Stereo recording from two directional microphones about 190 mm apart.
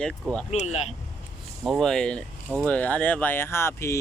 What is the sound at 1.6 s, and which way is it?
Speech, centre (ahead or behind).